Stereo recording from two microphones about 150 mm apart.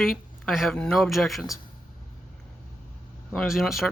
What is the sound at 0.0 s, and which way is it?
Speech, centre (ahead or behind).